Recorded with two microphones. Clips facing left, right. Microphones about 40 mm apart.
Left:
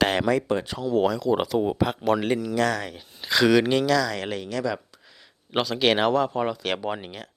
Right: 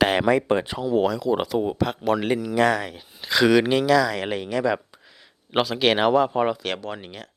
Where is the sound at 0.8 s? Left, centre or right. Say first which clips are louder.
Right 1 dB; centre.